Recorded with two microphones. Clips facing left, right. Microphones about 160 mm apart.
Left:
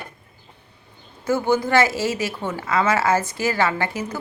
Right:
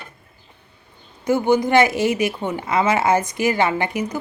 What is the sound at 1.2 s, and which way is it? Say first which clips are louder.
A woman's voice: right 3 dB; 15° right (ahead or behind).